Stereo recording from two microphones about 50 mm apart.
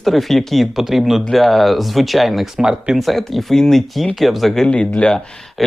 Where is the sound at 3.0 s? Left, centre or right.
Centre.